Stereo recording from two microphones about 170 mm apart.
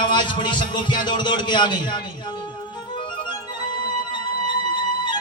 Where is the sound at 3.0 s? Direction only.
30° left (ahead or behind).